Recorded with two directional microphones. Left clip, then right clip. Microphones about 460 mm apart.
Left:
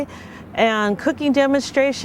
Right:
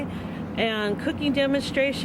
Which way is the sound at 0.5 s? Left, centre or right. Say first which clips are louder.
Left 8 dB; left.